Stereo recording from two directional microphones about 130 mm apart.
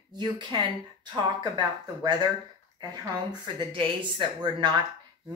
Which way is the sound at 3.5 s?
40° right (ahead or behind).